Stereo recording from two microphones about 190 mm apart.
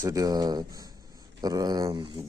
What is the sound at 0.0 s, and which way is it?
Speech, 15° right (ahead or behind).